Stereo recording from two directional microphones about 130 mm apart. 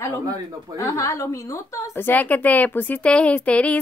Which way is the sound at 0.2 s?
25° right (ahead or behind).